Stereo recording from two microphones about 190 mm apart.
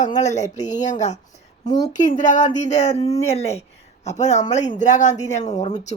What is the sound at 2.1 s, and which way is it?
Speech, 40° left (ahead or behind).